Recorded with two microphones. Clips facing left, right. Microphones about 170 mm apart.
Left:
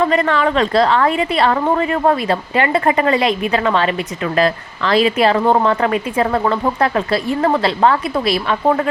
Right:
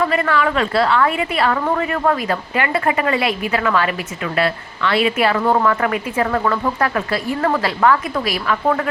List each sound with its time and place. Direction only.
0.0 s a woman's voice: 30° left (ahead or behind)